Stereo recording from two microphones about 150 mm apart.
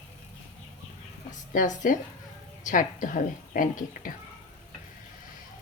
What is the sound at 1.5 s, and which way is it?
Speech, 60° left (ahead or behind).